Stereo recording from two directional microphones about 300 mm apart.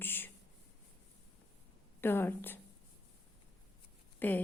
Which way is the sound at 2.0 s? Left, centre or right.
Centre.